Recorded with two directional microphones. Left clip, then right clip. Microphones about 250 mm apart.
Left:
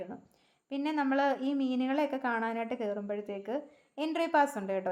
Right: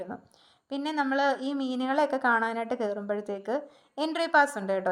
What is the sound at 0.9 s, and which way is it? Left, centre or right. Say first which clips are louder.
Speech: right 3 dB; centre.